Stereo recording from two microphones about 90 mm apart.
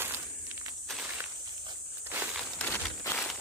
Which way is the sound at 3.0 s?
35° left (ahead or behind).